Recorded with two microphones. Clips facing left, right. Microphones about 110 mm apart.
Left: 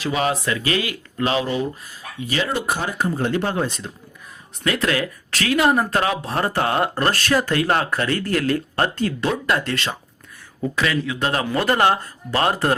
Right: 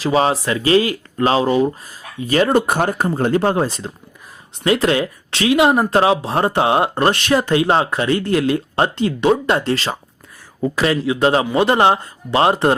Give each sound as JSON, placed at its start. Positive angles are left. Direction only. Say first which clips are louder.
{"t": 0.0, "sound": "speech", "louder": "right 5 dB", "side_deg": -35}
{"t": 2.2, "sound": "speech", "louder": "right 8 dB", "side_deg": -45}